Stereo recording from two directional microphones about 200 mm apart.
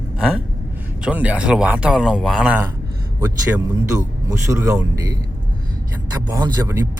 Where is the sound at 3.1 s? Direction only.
15° right (ahead or behind).